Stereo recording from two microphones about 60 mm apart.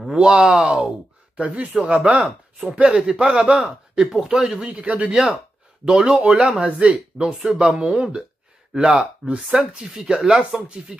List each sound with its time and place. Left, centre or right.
0.1 s speech: centre
2.9 s speech: centre; by 5.1 s right
5.1 s speech: centre